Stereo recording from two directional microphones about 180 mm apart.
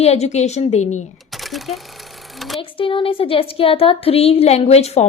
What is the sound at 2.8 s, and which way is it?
A woman's voice, 30° left (ahead or behind).